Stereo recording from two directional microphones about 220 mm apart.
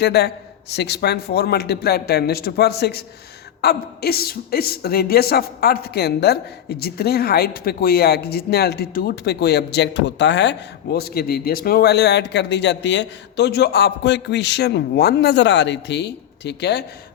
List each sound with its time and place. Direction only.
0.0 s speech: 50° left (ahead or behind)